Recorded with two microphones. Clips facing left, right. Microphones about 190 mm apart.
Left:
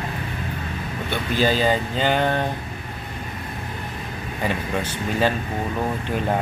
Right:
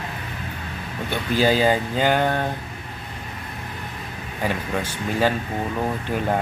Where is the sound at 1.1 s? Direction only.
10° right (ahead or behind).